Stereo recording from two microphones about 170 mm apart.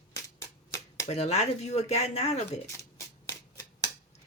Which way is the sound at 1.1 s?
40° left (ahead or behind).